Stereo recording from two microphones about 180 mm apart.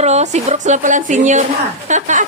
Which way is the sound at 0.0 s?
40° right (ahead or behind).